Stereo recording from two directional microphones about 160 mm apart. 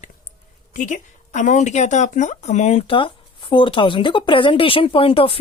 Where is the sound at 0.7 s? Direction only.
55° left (ahead or behind).